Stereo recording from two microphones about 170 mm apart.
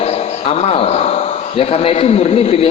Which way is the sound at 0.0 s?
40° left (ahead or behind).